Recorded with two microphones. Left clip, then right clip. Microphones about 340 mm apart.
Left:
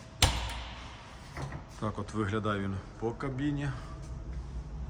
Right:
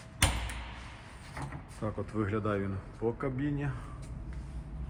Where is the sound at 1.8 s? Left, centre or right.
Centre.